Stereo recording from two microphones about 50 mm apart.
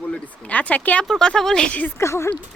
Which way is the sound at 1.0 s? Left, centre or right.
Centre.